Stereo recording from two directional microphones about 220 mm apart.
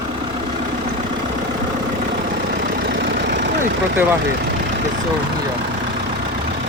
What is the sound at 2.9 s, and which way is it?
Vehicle, 50° right (ahead or behind).